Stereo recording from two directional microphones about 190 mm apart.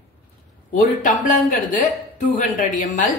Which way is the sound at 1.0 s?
40° left (ahead or behind).